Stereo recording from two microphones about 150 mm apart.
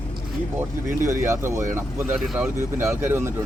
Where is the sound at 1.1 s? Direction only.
20° right (ahead or behind).